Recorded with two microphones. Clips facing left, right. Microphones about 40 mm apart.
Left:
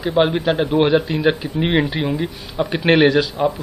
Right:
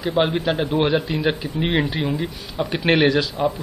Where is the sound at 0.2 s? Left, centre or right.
Centre.